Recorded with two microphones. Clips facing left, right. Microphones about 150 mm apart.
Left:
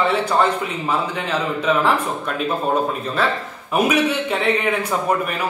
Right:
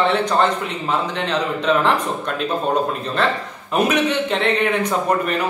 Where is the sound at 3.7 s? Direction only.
10° left (ahead or behind).